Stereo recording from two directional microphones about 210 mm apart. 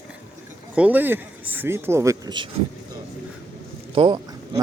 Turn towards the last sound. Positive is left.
turn(degrees=-20)  # may be behind; listen again after turning